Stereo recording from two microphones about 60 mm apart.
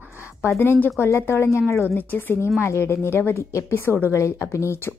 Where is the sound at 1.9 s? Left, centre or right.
Left.